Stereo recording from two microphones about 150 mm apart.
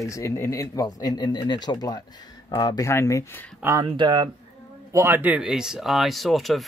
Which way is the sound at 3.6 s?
20° right (ahead or behind).